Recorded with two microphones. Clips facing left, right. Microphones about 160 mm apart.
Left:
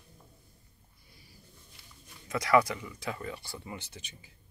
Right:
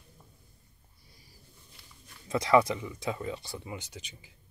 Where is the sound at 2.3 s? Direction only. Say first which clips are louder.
Right 2 dB; 25° right (ahead or behind).